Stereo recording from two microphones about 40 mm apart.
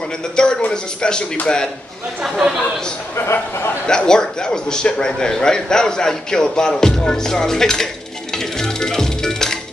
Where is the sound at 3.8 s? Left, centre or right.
Centre.